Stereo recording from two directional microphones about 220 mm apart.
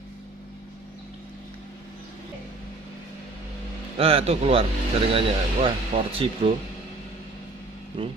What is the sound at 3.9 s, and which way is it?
Speech, 25° right (ahead or behind).